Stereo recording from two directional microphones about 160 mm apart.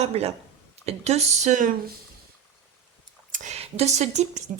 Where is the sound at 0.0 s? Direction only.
40° right (ahead or behind).